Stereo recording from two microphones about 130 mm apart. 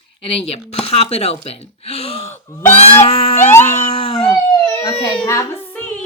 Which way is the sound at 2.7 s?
50° left (ahead or behind).